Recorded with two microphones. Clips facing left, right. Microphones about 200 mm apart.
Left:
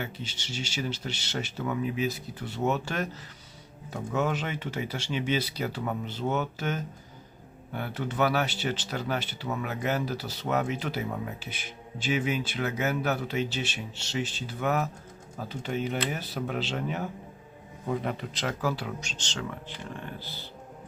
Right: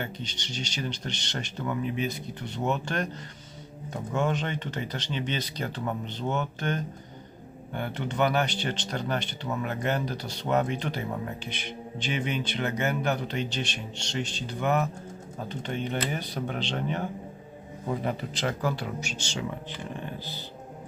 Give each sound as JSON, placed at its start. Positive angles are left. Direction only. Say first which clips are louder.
{"t": 0.0, "sound": "speech", "louder": "right 1 dB", "side_deg": 5}
{"t": 19.0, "sound": "speech", "louder": "right 3 dB", "side_deg": -10}